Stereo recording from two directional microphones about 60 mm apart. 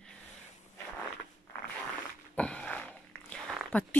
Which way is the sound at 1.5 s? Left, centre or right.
Left.